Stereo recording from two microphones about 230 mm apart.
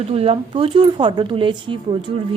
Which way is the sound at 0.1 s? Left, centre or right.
Right.